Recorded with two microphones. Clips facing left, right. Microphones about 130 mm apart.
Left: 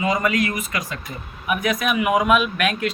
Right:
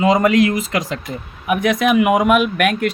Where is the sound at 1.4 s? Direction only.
65° right (ahead or behind).